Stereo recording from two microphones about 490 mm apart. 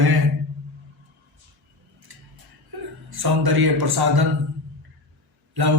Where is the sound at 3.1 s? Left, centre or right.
Right.